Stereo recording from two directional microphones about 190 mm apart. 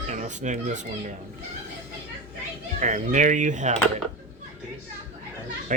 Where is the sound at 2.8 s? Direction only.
40° right (ahead or behind).